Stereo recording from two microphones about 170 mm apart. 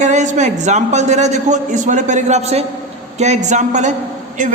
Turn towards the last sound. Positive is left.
turn(degrees=-50)  # may be behind; listen again after turning